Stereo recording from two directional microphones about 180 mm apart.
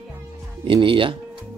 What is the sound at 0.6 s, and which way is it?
Speech, 30° right (ahead or behind).